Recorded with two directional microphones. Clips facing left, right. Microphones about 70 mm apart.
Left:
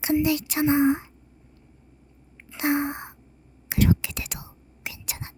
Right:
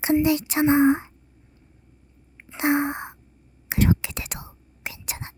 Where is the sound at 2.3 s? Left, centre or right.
Right.